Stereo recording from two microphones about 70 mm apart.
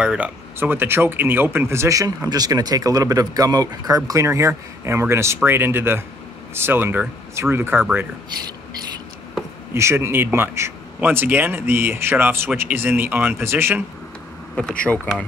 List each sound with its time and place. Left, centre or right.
0.0 s speech: centre
0.6 s speech: right
9.8 s speech: right
11.0 s speech: right
14.5 s speech: centre